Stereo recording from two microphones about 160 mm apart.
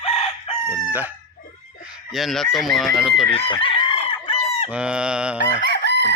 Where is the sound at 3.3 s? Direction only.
35° left (ahead or behind).